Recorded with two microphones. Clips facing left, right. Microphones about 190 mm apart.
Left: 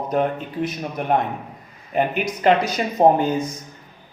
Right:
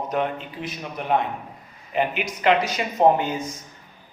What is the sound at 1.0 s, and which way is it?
A man's voice, 50° left (ahead or behind).